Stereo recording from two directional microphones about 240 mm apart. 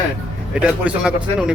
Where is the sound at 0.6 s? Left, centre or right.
Centre.